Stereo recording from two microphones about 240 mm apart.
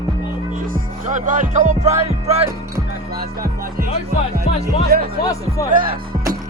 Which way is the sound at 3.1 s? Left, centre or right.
Right.